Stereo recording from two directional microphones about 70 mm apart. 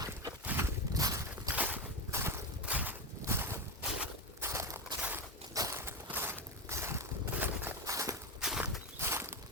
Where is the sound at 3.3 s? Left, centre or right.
Right.